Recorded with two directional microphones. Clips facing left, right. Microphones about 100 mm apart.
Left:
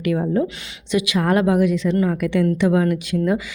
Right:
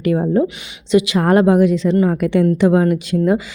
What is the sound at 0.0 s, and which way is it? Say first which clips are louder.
A woman's voice: right 4 dB; 35° right (ahead or behind).